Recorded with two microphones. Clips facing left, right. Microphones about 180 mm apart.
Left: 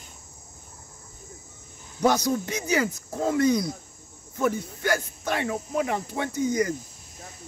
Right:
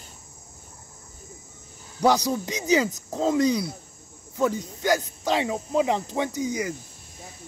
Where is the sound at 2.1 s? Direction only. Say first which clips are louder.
Even; 15° right (ahead or behind).